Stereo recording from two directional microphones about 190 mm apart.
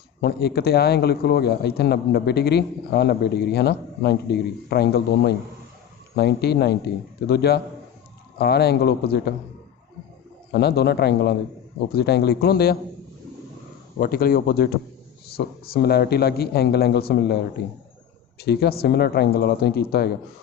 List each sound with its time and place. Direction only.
0.2 s a man's voice: 55° left (ahead or behind)
10.5 s a man's voice: 60° left (ahead or behind)
14.0 s a man's voice: 50° left (ahead or behind)